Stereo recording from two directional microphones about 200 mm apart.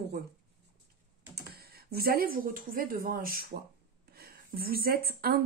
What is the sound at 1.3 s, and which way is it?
A woman's voice, 50° right (ahead or behind).